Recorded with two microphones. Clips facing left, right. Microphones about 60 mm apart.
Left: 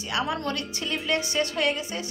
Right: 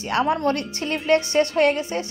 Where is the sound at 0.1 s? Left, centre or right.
Right.